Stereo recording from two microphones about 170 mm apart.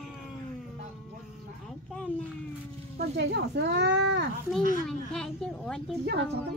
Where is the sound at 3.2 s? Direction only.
80° right.